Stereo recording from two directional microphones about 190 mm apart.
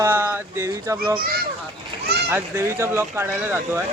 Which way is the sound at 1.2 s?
50° right (ahead or behind).